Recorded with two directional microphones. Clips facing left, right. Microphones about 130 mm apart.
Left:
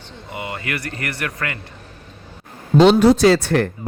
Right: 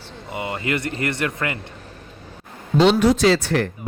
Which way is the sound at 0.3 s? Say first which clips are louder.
Right 3 dB; 25° right (ahead or behind).